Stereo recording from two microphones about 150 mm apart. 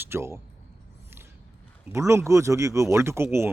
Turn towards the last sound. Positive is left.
turn(degrees=-15)  # may be behind; listen again after turning